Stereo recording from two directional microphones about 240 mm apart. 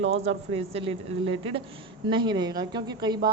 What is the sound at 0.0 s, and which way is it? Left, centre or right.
A woman's voice, right.